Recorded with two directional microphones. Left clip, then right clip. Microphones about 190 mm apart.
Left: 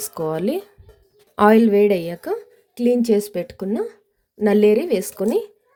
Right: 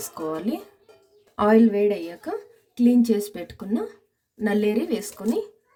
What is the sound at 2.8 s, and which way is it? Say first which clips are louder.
A woman's voice: left 3 dB; 40° left (ahead or behind).